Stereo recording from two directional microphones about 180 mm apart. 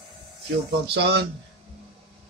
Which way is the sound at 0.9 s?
70° right (ahead or behind).